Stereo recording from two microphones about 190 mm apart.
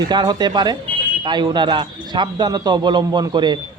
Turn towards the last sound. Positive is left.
turn(degrees=-20)  # may be behind; listen again after turning